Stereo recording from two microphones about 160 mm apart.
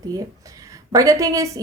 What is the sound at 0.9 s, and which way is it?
Speech, 20° right (ahead or behind).